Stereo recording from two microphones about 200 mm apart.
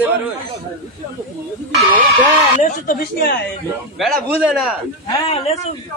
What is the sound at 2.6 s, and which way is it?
Speech, 40° left (ahead or behind).